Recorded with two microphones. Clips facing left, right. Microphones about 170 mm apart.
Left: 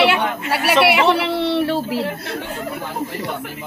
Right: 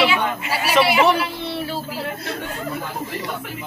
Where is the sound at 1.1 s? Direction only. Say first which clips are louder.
Left 5 dB; 75° left (ahead or behind).